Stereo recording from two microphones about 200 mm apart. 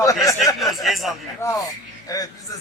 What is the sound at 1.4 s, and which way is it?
Speech, 15° left (ahead or behind).